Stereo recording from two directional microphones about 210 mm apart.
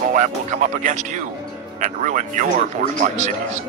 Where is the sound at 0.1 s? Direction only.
35° right (ahead or behind).